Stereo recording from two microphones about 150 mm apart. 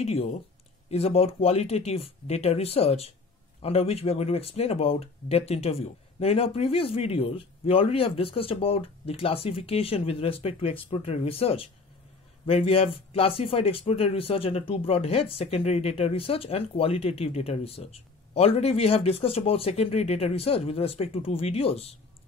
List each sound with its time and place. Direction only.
0.0 s speech: 45° left (ahead or behind)